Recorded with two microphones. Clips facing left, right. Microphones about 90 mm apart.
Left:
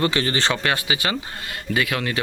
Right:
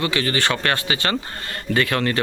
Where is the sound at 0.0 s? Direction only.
30° left (ahead or behind).